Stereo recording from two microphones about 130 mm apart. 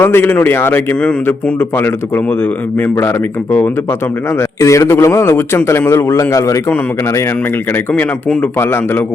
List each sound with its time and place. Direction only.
0.0 s a man's voice: 15° left (ahead or behind)
8.5 s speech: 20° left (ahead or behind)